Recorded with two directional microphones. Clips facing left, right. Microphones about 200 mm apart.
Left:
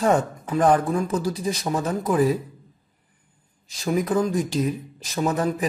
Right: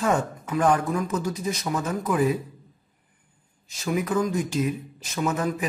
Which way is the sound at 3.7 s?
35° left (ahead or behind).